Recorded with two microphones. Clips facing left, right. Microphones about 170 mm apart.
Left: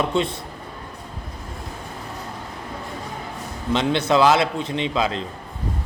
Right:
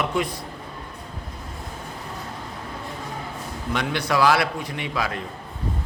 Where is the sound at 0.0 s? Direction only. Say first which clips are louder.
Left 3 dB; 25° left (ahead or behind).